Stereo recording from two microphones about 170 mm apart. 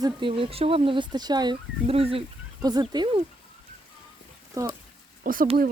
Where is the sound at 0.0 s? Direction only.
30° right (ahead or behind).